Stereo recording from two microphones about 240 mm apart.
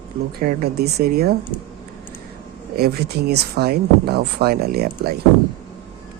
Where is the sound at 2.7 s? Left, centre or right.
Right.